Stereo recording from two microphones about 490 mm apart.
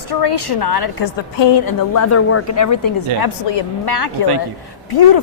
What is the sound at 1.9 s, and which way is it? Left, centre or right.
A woman's voice, left.